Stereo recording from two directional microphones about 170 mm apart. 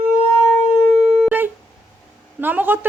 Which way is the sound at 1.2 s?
10° right (ahead or behind).